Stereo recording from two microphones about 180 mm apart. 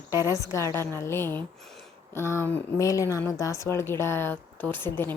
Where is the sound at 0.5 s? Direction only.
15° left (ahead or behind).